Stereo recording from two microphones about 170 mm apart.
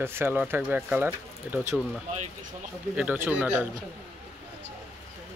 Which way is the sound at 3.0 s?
10° right (ahead or behind).